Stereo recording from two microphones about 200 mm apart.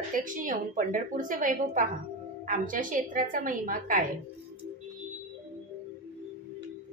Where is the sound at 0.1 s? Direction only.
40° right (ahead or behind).